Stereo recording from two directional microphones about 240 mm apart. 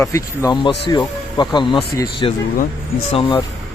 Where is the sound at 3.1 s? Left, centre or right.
Left.